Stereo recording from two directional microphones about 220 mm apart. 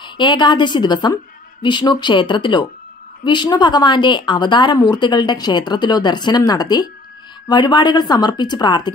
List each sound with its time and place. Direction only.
0.0 s a woman's voice: 20° left (ahead or behind)